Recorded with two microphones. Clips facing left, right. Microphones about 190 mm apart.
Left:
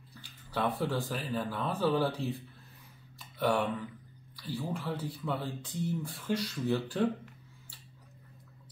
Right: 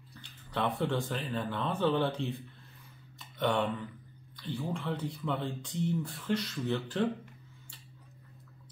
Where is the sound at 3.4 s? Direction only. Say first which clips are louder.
Left 1 dB; 5° left (ahead or behind).